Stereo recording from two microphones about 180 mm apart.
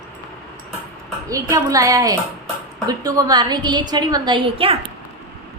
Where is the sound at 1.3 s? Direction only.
20° right (ahead or behind).